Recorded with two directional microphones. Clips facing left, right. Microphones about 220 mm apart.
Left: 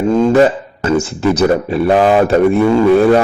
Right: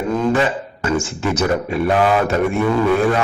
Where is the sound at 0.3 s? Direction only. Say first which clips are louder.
Left 8 dB; 40° left (ahead or behind).